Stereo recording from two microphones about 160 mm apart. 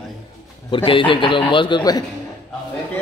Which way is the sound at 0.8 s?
30° left (ahead or behind).